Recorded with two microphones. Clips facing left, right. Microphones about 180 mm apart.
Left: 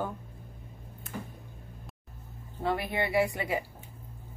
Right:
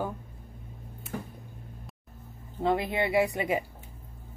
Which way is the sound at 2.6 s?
20° right (ahead or behind).